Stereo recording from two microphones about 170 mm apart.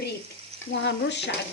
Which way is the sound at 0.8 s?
90° left.